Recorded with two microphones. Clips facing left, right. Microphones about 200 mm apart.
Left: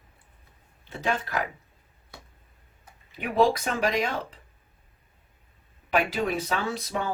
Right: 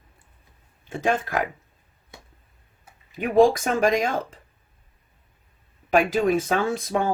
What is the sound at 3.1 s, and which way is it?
Speech, 45° right (ahead or behind).